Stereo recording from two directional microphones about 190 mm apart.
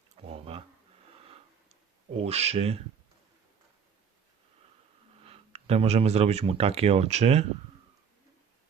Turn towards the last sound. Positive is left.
turn(degrees=-35)  # may be behind; listen again after turning